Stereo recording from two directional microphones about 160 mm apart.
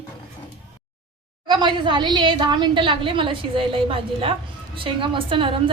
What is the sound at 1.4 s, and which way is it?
A woman's voice, 30° right (ahead or behind).